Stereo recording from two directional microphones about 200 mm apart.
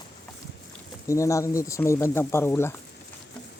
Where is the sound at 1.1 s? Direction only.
15° left (ahead or behind).